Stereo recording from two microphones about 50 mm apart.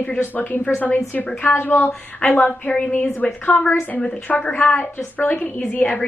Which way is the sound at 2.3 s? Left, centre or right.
Left.